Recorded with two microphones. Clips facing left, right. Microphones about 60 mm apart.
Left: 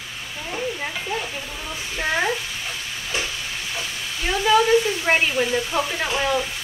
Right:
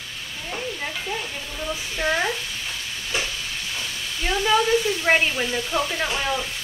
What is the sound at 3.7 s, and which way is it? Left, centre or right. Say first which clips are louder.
Speech: left 1 dB; centre.